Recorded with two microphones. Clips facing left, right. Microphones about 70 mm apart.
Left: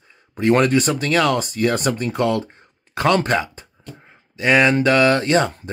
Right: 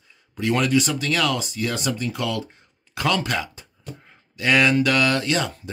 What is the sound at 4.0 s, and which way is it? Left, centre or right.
Speech, left.